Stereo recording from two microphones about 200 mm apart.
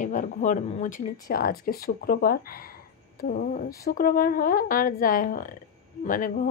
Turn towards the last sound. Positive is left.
turn(degrees=40)  # may be behind; listen again after turning